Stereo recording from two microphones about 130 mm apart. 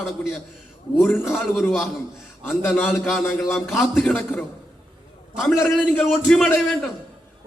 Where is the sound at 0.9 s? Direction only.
20° left (ahead or behind).